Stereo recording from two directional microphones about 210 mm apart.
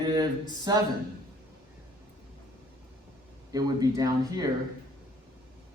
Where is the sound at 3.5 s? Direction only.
20° right (ahead or behind).